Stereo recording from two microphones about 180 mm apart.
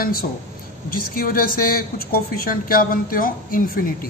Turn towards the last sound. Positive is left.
turn(degrees=50)  # may be behind; listen again after turning